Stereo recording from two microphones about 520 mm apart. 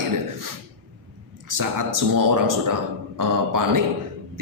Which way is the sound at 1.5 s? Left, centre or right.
Right.